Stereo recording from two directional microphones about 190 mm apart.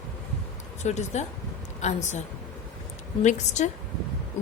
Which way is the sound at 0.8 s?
35° left (ahead or behind).